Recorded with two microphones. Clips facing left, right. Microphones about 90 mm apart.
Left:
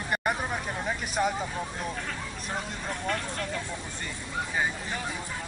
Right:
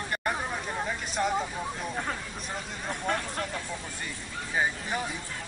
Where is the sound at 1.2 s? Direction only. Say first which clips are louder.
Left 1 dB; 10° left (ahead or behind).